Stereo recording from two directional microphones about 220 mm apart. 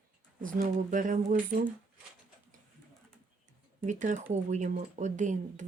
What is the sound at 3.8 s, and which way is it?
Speech, 35° right (ahead or behind).